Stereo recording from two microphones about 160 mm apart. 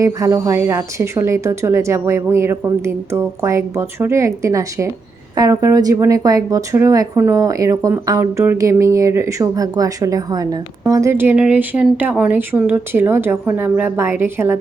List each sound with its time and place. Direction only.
0.0 s speech: 20° right (ahead or behind)